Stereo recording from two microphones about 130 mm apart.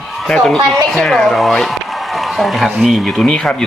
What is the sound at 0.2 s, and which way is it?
A woman's voice, centre (ahead or behind).